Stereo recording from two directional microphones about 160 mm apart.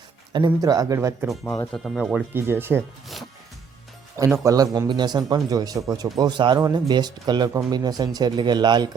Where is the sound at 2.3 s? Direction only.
15° right (ahead or behind).